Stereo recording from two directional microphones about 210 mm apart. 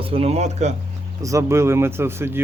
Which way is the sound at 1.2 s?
15° right (ahead or behind).